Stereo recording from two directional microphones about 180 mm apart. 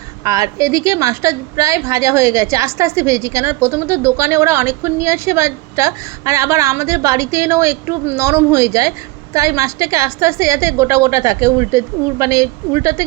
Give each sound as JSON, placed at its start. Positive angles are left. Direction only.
{"t": 0.3, "sound": "a woman's voice", "side_deg": -20}